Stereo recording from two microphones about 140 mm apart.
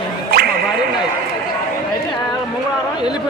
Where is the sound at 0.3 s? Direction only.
90° right.